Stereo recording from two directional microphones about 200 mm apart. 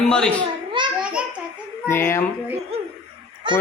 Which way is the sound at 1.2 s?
5° right (ahead or behind).